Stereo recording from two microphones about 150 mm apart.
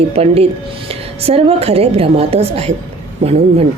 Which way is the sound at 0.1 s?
40° right (ahead or behind).